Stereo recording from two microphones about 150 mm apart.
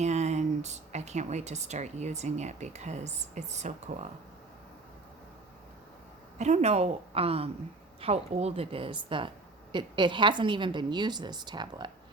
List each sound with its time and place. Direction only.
0.0 s speech: 50° right (ahead or behind)
6.4 s a woman's voice: 50° right (ahead or behind); by 11.9 s 30° right (ahead or behind)